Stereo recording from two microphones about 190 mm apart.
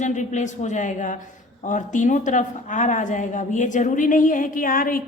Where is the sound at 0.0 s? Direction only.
40° left (ahead or behind).